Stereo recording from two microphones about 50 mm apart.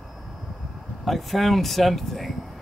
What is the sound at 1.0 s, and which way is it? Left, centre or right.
Speech, centre.